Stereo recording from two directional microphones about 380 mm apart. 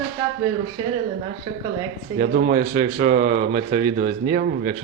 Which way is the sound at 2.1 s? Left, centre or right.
Right.